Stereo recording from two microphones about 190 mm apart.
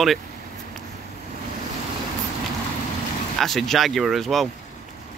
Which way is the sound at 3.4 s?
Centre (ahead or behind).